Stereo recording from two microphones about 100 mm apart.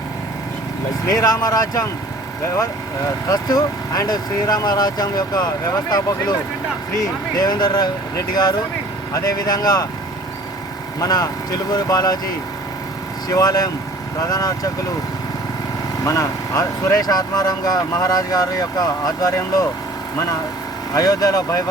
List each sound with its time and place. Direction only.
1.0 s speech: 35° left (ahead or behind)
3.2 s speech: 35° left (ahead or behind)
11.0 s speech: 40° left (ahead or behind)
13.2 s speech: 35° left (ahead or behind)
16.0 s speech: 35° left (ahead or behind)
20.9 s speech: 35° left (ahead or behind)